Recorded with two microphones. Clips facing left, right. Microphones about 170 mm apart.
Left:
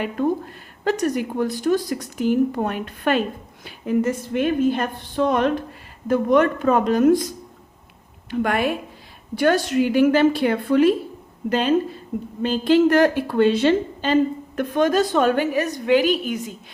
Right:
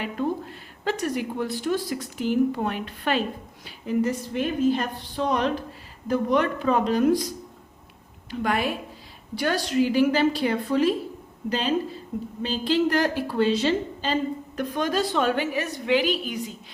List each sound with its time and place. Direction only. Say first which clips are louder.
0.0 s speech: left 5 dB; 50° left (ahead or behind)
8.3 s a woman's voice: left 4 dB; 55° left (ahead or behind)